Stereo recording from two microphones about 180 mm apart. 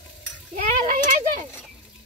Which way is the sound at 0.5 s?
45° right (ahead or behind).